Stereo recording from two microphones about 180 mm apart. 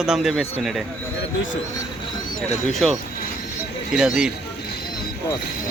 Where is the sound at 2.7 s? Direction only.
Centre (ahead or behind).